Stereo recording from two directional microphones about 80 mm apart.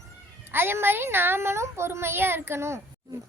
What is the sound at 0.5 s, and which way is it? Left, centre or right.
A woman's voice, right.